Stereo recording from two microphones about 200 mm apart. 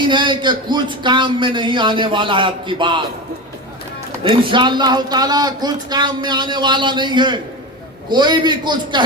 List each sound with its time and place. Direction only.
0.0 s a man's voice: 25° right (ahead or behind)
4.2 s a man's voice: 25° right (ahead or behind)